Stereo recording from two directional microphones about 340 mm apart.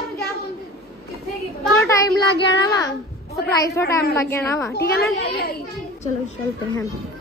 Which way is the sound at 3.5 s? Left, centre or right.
Centre.